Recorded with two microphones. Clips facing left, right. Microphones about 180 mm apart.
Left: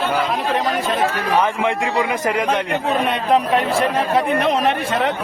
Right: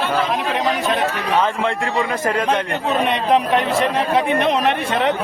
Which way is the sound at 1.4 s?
15° left (ahead or behind).